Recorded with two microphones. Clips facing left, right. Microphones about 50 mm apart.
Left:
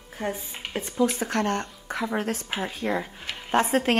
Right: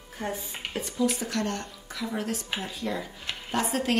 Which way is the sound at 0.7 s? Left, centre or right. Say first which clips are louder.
Left 3 dB; left.